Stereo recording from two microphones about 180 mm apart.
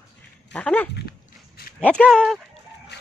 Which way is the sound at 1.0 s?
60° left (ahead or behind).